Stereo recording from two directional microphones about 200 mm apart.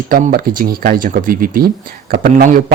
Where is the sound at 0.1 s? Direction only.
45° right (ahead or behind).